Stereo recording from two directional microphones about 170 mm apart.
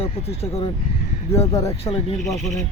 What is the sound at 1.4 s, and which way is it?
Speech, 15° left (ahead or behind).